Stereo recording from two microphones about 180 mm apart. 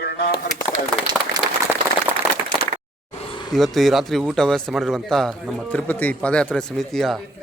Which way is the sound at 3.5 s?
Centre (ahead or behind).